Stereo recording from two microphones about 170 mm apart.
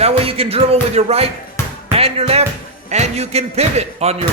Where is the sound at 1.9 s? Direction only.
35° right (ahead or behind).